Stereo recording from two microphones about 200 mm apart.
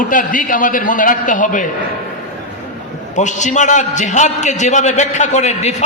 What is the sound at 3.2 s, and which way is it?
A man's voice, 35° left (ahead or behind).